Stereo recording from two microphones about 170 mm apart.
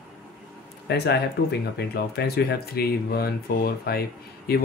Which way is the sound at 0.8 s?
75° left (ahead or behind).